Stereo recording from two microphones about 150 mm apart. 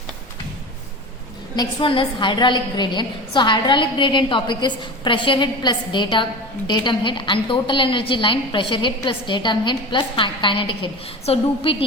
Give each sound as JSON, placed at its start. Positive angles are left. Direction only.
{"t": 1.5, "sound": "a woman's voice", "side_deg": 35}